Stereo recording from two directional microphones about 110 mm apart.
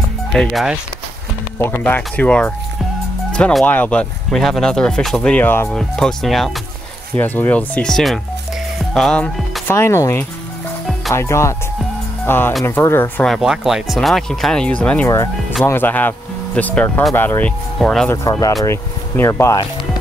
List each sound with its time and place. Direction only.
0.3 s speech: centre (ahead or behind)
1.6 s speech: 20° left (ahead or behind)
3.3 s music: 10° left (ahead or behind)
3.6 s speech: 15° left (ahead or behind)
5.7 s speech: 5° left (ahead or behind)
7.2 s speech: 15° left (ahead or behind)
8.7 s music: 5° left (ahead or behind)
9.7 s speech: 25° left (ahead or behind)
13.4 s speech: 5° right (ahead or behind); by 17.5 s 20° left (ahead or behind)
17.7 s speech: 5° left (ahead or behind)
18.3 s speech: 30° left (ahead or behind)